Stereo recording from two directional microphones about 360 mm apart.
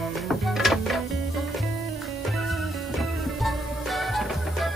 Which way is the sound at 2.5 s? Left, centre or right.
Centre.